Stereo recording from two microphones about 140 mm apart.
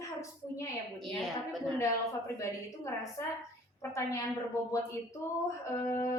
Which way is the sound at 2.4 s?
20° left (ahead or behind).